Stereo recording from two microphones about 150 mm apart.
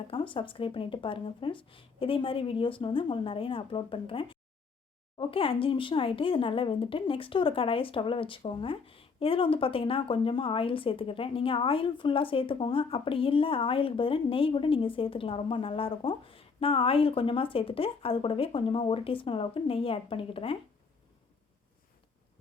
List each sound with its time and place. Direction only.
0.1 s speech: 35° left (ahead or behind)